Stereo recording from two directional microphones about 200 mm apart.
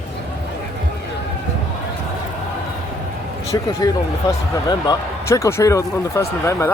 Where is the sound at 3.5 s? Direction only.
20° left (ahead or behind).